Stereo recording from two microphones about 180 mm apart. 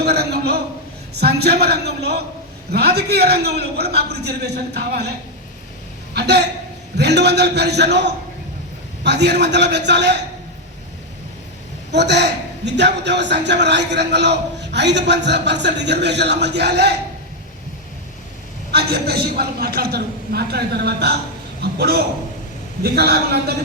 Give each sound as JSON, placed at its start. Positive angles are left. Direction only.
{"t": 0.0, "sound": "a sound", "side_deg": -65}
{"t": 1.2, "sound": "a man's voice", "side_deg": -65}
{"t": 6.1, "sound": "a man's voice", "side_deg": -70}
{"t": 11.9, "sound": "a man's voice", "side_deg": -75}
{"t": 18.7, "sound": "a man's voice", "side_deg": -60}